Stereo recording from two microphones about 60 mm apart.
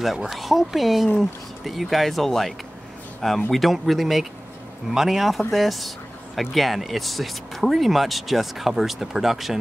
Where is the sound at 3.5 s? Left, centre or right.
Centre.